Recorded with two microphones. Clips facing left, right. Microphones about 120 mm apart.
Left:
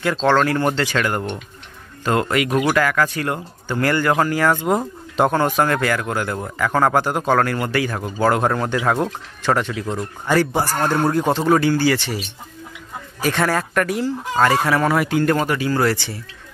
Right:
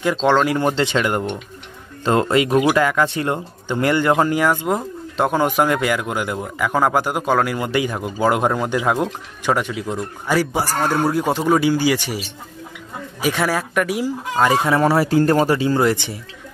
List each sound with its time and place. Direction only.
0.0 s a man's voice: 15° right (ahead or behind)
4.5 s speech: centre (ahead or behind)
5.3 s a man's voice: 10° right (ahead or behind)
13.2 s a man's voice: 10° right (ahead or behind)